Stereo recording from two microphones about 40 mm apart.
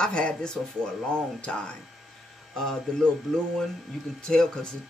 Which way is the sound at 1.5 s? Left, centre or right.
Left.